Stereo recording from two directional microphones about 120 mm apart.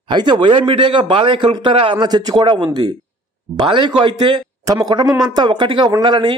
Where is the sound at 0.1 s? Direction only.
40° right (ahead or behind).